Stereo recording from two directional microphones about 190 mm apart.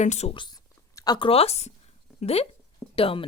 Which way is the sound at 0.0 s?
35° left (ahead or behind).